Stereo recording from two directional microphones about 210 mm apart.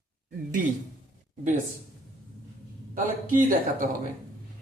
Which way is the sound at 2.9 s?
40° right (ahead or behind).